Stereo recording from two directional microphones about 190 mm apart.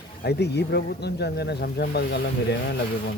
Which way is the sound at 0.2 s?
60° left (ahead or behind).